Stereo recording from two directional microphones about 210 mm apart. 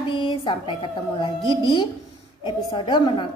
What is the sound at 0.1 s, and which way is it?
A woman's voice, 25° left (ahead or behind).